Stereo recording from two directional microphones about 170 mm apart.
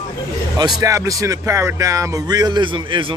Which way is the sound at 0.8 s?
20° right (ahead or behind).